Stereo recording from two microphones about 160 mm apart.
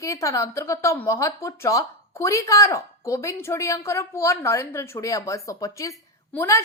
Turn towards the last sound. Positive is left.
turn(degrees=20)  # may be behind; listen again after turning